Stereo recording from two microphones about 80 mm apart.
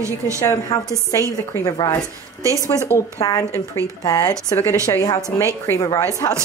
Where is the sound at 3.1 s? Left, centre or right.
Left.